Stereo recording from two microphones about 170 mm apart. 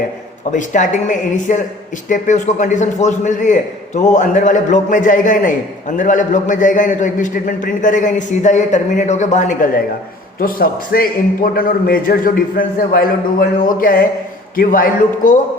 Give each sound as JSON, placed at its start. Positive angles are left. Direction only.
{"t": 0.5, "sound": "a man's voice", "side_deg": 45}